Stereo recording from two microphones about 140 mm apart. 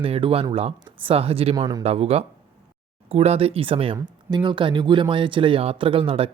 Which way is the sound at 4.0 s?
30° right (ahead or behind).